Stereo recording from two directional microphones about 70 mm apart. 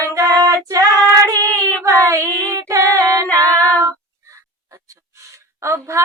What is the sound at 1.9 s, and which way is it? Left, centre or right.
Child singing, right.